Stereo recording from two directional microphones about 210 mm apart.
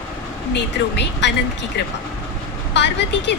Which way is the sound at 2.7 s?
55° left (ahead or behind).